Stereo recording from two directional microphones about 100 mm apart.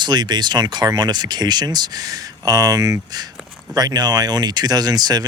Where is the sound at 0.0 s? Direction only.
45° right (ahead or behind).